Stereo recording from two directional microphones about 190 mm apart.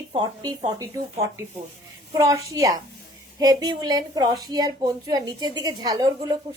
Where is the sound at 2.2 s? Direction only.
15° right (ahead or behind).